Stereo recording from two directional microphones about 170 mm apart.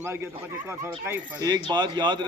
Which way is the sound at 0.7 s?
15° right (ahead or behind).